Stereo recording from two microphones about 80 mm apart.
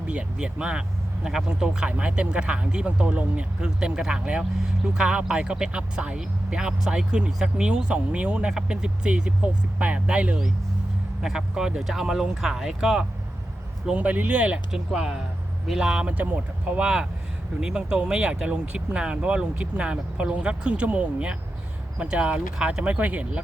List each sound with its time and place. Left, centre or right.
0.1 s speech: centre
13.9 s speech: centre
14.7 s speech: centre